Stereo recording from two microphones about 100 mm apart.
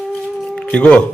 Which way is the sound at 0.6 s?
10° left (ahead or behind).